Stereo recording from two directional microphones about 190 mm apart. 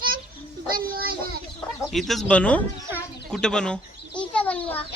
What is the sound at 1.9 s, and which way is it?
Speech, centre (ahead or behind).